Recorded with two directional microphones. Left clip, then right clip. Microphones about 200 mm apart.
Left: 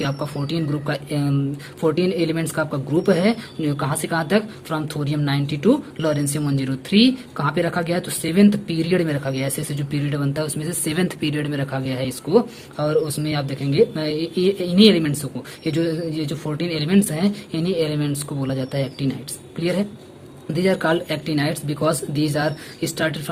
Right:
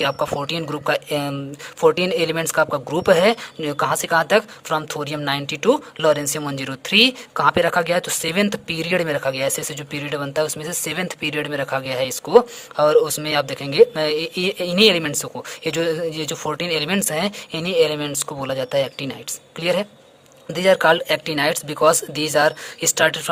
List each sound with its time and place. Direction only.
0.0 s speech: 40° right (ahead or behind)